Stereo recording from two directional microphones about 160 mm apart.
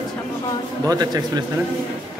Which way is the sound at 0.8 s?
25° right (ahead or behind).